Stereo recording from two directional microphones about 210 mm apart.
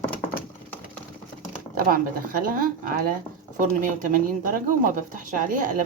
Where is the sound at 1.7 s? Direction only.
45° right (ahead or behind).